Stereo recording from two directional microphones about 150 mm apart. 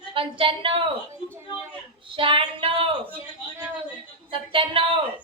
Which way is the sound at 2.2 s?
35° right (ahead or behind).